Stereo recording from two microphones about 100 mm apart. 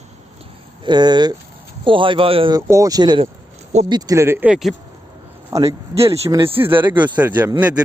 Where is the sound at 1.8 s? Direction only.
60° right (ahead or behind).